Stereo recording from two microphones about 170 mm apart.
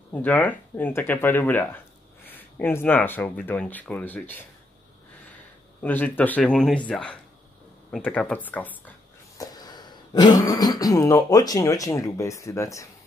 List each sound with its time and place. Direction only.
0.1 s speech: 10° left (ahead or behind)
5.8 s speech: 10° left (ahead or behind)
9.4 s speech: 25° left (ahead or behind)